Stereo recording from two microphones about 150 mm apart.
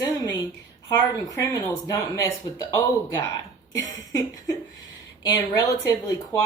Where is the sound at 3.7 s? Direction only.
25° left (ahead or behind).